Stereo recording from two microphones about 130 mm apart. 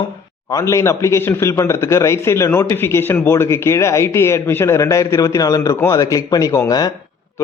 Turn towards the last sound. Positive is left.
turn(degrees=25)  # may be behind; listen again after turning